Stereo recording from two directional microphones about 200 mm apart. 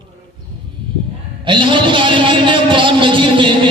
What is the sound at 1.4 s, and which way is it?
A man's voice, 25° right (ahead or behind).